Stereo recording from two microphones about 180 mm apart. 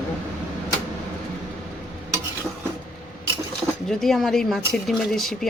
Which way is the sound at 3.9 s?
Centre (ahead or behind).